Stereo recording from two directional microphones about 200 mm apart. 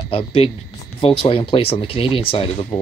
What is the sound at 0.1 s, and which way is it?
Speech, 30° left (ahead or behind).